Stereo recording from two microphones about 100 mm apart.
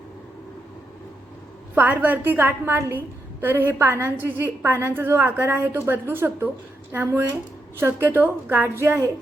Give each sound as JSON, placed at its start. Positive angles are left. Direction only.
{"t": 1.7, "sound": "a woman's voice", "side_deg": -15}